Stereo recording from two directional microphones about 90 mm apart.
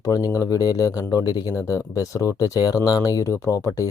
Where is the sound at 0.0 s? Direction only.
45° left (ahead or behind).